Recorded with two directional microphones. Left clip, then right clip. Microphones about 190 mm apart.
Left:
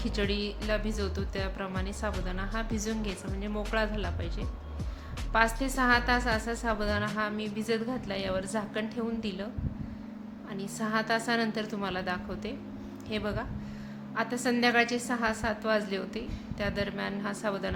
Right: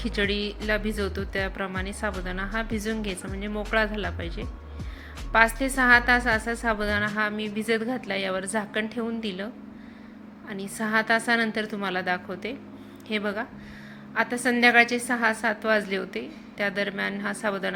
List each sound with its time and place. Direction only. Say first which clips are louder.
0.0 s a woman's voice: right 5 dB; 15° right (ahead or behind)
10.5 s a woman's voice: right 6 dB; 15° right (ahead or behind)